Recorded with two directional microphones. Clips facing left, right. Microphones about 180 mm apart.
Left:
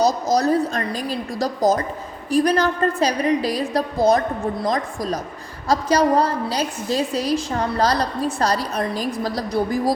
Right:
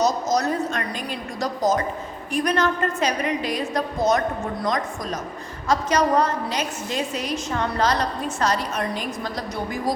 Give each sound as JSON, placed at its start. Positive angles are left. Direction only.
{"t": 0.0, "sound": "a woman's voice", "side_deg": 35}